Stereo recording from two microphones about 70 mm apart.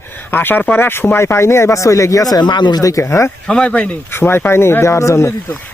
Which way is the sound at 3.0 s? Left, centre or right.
Left.